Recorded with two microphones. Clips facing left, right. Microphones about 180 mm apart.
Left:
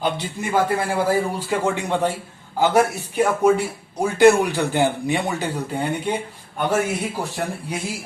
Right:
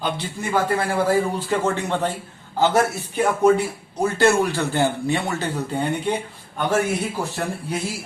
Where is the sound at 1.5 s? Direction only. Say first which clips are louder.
Even; 10° left (ahead or behind).